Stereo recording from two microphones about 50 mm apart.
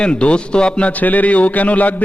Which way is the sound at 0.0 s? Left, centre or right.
Centre.